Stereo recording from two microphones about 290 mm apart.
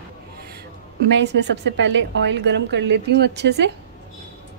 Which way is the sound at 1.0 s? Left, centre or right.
Right.